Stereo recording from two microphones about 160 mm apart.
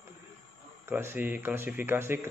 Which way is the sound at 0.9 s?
15° right (ahead or behind).